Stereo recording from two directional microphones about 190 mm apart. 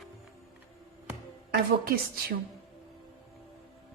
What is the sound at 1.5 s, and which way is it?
Speech, 50° right (ahead or behind).